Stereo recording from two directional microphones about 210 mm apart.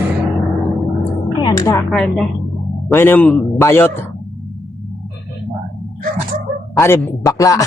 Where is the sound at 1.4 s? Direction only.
20° left (ahead or behind).